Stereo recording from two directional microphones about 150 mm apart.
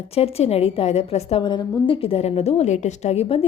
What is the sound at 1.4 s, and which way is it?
A woman's voice, 30° left (ahead or behind).